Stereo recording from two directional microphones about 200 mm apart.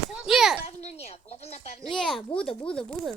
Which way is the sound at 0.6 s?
35° left (ahead or behind).